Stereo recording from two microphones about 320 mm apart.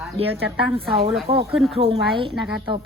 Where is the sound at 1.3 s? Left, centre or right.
Centre.